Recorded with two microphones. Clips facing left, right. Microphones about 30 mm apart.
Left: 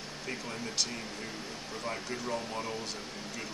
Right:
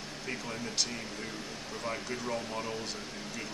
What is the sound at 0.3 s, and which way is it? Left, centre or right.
Speech, centre.